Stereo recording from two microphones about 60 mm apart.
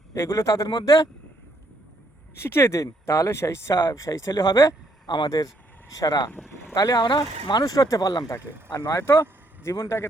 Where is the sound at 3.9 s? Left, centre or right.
Left.